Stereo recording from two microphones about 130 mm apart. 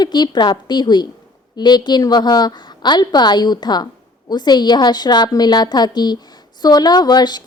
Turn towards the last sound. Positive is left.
turn(degrees=35)  # may be behind; listen again after turning